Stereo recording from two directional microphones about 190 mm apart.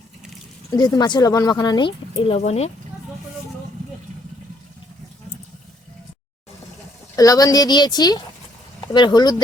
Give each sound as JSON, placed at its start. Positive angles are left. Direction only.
{"t": 0.7, "sound": "speech", "side_deg": 20}
{"t": 7.2, "sound": "speech", "side_deg": 20}